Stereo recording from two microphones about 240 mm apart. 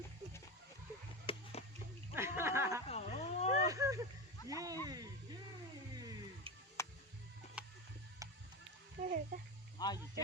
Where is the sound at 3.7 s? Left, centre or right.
Centre.